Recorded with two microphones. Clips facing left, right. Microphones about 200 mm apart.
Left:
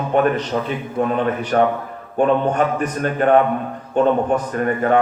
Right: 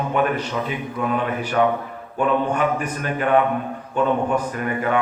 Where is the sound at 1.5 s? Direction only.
45° left (ahead or behind).